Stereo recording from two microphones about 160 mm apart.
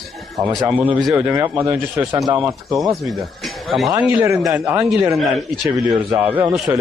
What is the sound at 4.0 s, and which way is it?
Speech, 15° right (ahead or behind).